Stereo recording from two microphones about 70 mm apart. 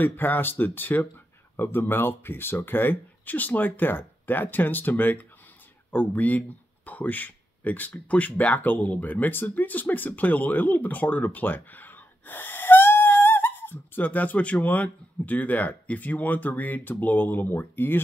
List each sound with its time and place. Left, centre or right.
0.0 s speech: left